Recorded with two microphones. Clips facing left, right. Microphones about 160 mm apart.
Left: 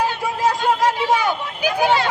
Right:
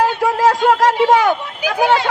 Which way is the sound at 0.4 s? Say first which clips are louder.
Right 4 dB; 85° right.